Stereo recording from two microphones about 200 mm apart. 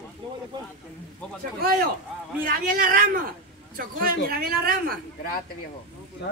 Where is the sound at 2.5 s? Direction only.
45° right (ahead or behind).